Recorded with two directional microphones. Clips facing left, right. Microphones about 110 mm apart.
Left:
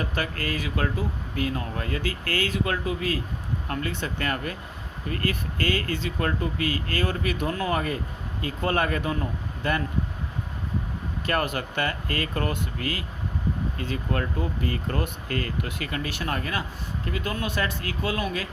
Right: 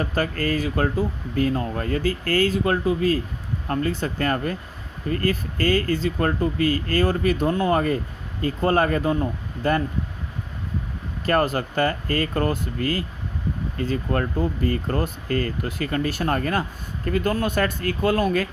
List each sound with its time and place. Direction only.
0.0 s speech: 40° right (ahead or behind)
11.3 s speech: 35° right (ahead or behind)